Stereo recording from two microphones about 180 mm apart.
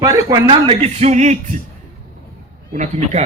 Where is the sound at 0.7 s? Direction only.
35° right (ahead or behind).